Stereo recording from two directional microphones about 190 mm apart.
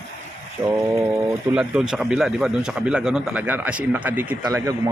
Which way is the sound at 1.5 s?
5° right (ahead or behind).